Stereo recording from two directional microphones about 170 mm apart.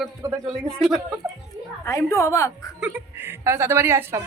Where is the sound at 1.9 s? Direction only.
15° left (ahead or behind).